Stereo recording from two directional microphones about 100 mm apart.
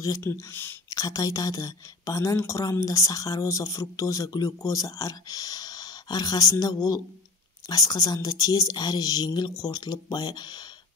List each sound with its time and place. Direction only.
0.0 s speech: 30° left (ahead or behind)
0.8 s speech: 35° left (ahead or behind)